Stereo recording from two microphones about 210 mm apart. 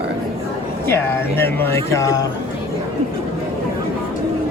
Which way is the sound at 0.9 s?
10° left (ahead or behind).